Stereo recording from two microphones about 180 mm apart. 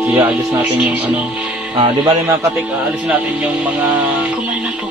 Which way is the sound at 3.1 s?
10° right (ahead or behind).